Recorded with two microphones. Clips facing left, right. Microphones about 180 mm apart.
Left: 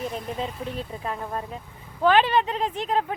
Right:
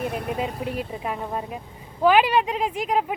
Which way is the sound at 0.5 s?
35° right (ahead or behind).